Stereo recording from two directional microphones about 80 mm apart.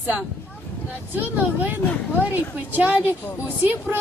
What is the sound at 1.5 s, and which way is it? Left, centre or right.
A woman's voice, right.